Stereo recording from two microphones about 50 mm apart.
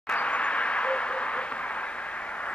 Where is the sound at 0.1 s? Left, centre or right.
Left.